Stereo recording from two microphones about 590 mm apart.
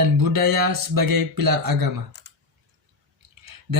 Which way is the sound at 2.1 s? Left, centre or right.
Centre.